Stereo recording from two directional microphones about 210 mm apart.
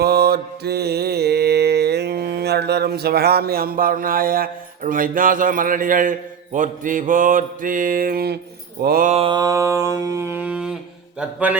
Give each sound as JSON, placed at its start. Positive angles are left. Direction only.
{"t": 0.0, "sound": "mantra", "side_deg": -50}
{"t": 9.1, "sound": "mantra", "side_deg": -25}